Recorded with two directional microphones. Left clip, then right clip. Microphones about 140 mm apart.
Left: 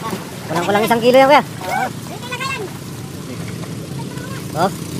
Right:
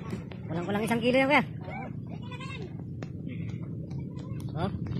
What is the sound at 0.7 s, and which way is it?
Speech, 5° left (ahead or behind).